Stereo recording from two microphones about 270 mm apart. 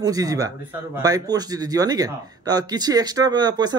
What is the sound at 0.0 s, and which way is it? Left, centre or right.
Speech, centre.